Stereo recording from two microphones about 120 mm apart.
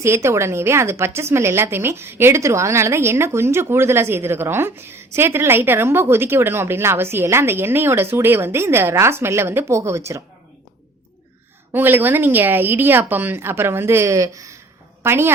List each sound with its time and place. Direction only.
0.0 s a woman's voice: 20° right (ahead or behind)
11.7 s a woman's voice: 15° right (ahead or behind)